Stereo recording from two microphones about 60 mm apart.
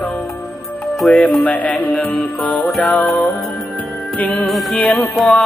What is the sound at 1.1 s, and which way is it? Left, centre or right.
Music, left.